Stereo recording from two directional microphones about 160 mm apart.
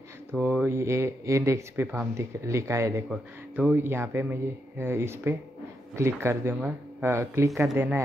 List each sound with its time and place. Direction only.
0.3 s speech: 10° right (ahead or behind)
3.1 s speech: 10° right (ahead or behind)